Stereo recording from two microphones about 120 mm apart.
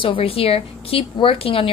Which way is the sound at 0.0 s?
50° left (ahead or behind).